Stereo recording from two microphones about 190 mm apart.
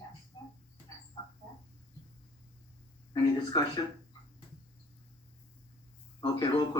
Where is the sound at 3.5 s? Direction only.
20° left (ahead or behind).